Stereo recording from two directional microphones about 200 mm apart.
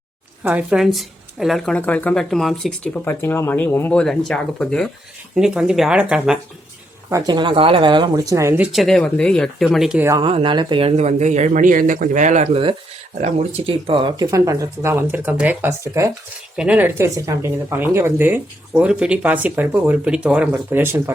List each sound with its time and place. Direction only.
0.4 s a woman's voice: 5° right (ahead or behind)
7.1 s speech: 20° right (ahead or behind); by 10.1 s 5° right (ahead or behind)
10.1 s speech: 25° right (ahead or behind)